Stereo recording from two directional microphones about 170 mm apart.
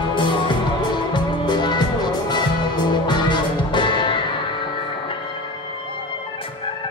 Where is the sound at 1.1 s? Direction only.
25° left (ahead or behind).